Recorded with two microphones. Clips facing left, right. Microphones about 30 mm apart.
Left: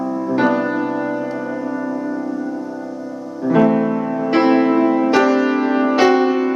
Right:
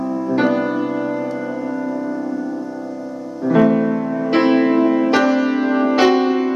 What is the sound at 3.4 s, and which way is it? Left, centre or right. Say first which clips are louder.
Music: even; centre.